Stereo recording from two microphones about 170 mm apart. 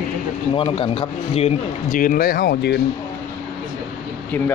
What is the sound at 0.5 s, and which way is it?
A man's voice, 30° left (ahead or behind).